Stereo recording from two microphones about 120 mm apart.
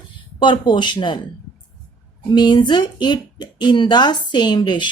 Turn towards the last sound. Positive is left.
turn(degrees=40)  # may be behind; listen again after turning